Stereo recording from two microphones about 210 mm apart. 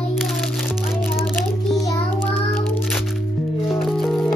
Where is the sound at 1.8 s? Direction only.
15° left (ahead or behind).